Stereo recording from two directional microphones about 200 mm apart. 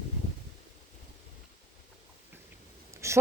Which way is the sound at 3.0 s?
15° right (ahead or behind).